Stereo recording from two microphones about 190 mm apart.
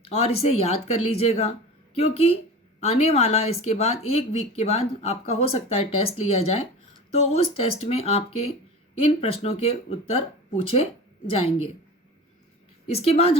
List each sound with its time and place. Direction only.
0.0 s speech: 30° left (ahead or behind)
12.9 s speech: 30° left (ahead or behind)